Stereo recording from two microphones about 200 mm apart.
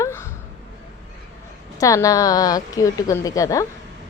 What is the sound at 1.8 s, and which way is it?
A woman's voice, 15° left (ahead or behind).